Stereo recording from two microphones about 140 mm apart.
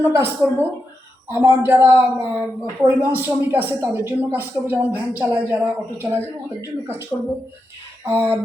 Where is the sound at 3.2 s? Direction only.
15° right (ahead or behind).